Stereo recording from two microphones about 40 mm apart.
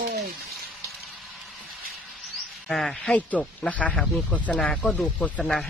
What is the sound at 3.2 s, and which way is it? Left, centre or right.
A woman's voice, left.